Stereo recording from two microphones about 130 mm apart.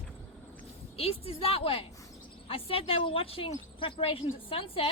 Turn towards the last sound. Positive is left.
turn(degrees=45)  # may be behind; listen again after turning